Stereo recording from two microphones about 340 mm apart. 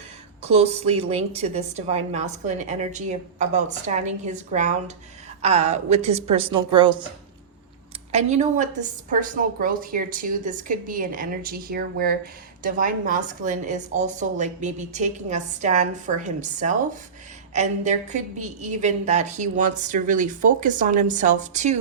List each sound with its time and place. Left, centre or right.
0.4 s a woman's voice: centre
8.1 s a woman's voice: centre